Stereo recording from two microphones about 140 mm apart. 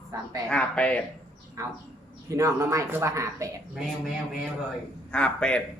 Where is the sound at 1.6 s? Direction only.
20° right (ahead or behind).